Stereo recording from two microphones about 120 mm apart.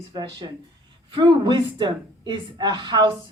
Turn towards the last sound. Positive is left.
turn(degrees=-40)  # may be behind; listen again after turning